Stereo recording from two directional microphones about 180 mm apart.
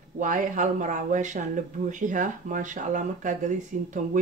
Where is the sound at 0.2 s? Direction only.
45° right (ahead or behind).